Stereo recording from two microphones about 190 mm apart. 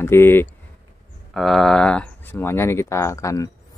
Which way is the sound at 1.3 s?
Centre (ahead or behind).